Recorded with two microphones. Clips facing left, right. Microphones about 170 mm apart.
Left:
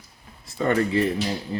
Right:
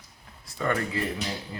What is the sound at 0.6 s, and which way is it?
Speech, 25° left (ahead or behind).